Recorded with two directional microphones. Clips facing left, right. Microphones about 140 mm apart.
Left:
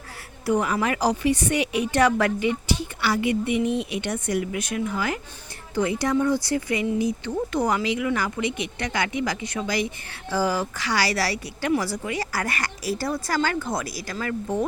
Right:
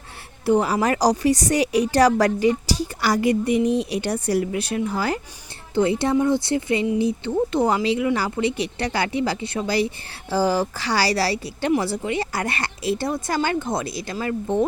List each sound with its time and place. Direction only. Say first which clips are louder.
0.4 s speech: right 4 dB; 30° right (ahead or behind)